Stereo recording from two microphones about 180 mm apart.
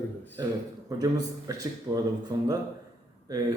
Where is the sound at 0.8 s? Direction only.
20° right (ahead or behind).